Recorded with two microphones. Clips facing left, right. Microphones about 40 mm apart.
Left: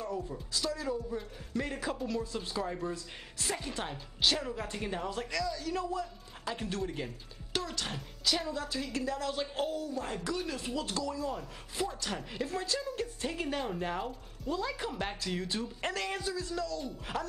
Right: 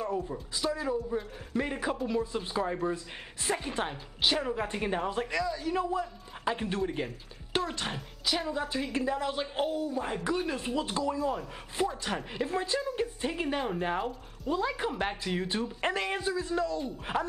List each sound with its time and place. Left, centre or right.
0.0 s speech: right